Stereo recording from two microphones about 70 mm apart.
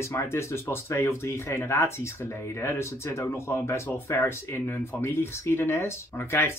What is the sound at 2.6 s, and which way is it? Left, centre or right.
Speech, left.